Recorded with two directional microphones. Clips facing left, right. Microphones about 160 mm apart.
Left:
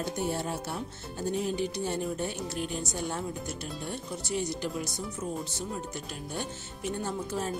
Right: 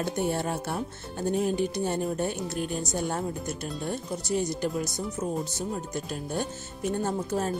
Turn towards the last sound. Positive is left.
turn(degrees=-45)  # may be behind; listen again after turning